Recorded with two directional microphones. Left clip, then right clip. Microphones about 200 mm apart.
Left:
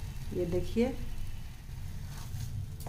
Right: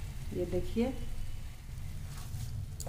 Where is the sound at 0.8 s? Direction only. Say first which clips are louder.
Left 4 dB; 20° left (ahead or behind).